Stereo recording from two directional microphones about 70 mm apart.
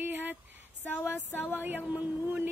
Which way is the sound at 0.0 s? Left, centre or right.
Right.